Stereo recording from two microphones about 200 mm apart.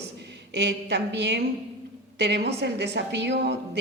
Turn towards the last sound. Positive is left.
turn(degrees=-60)  # may be behind; listen again after turning